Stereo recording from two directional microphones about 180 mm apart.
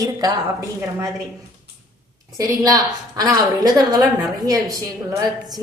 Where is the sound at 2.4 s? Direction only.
20° right (ahead or behind).